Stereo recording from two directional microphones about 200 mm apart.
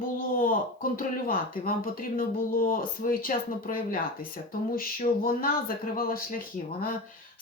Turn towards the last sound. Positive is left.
turn(degrees=45)  # may be behind; listen again after turning